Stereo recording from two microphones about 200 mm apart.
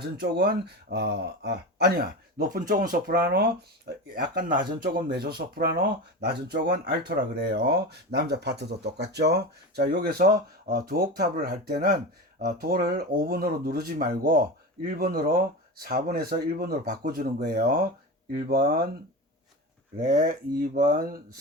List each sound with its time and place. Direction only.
0.2 s speech: 50° right (ahead or behind)
20.1 s speech: 45° right (ahead or behind)